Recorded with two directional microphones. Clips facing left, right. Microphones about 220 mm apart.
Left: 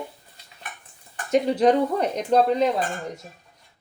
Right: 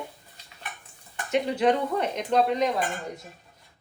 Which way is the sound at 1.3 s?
35° left (ahead or behind).